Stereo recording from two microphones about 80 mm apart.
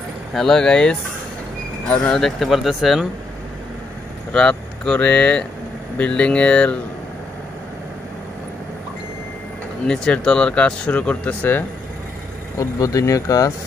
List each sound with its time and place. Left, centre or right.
0.3 s speech: centre
4.3 s speech: centre
9.8 s speech: centre
12.5 s speech: left